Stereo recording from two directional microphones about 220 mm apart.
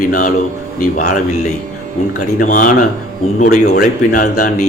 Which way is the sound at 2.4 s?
35° left (ahead or behind).